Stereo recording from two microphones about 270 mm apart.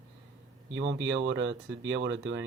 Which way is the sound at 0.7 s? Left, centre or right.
Right.